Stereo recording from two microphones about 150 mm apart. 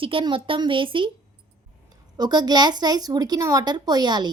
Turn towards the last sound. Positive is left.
turn(degrees=-30)  # may be behind; listen again after turning